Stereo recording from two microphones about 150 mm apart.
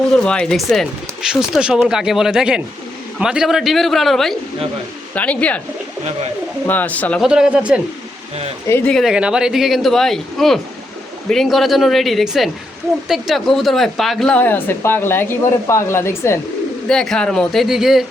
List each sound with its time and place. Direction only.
0.1 s speech: 5° left (ahead or behind)
6.7 s speech: 10° left (ahead or behind)
7.2 s speech: 5° right (ahead or behind)
8.6 s speech: 15° left (ahead or behind)
8.9 s speech: centre (ahead or behind); by 16.4 s 15° left (ahead or behind)
16.9 s speech: 5° left (ahead or behind)